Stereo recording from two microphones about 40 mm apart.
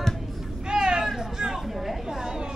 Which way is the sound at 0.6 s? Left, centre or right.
Right.